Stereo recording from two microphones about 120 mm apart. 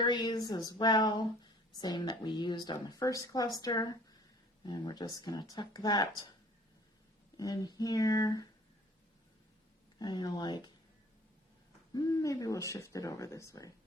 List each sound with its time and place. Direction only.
0.0 s speech: 40° left (ahead or behind)
7.3 s speech: 30° left (ahead or behind)
10.0 s speech: 35° left (ahead or behind)
11.9 s speech: 30° left (ahead or behind)